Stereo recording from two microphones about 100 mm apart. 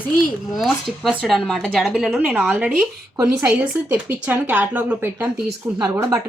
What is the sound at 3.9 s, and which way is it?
Speech, 20° right (ahead or behind).